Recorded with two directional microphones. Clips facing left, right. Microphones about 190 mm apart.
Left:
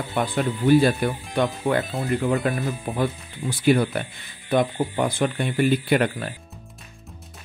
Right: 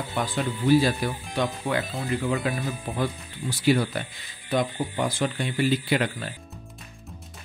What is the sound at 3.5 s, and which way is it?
Speech, 55° left (ahead or behind).